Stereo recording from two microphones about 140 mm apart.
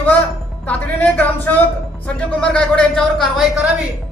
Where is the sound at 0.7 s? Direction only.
10° left (ahead or behind).